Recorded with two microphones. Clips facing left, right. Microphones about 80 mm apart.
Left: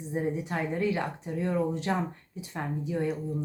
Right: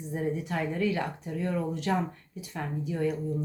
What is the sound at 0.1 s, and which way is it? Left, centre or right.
A woman's voice, left.